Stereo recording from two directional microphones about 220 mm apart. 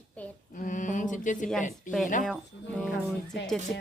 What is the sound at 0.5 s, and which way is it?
Mantra, 35° left (ahead or behind).